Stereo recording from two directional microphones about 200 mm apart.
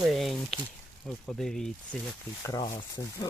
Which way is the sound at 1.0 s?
Centre (ahead or behind).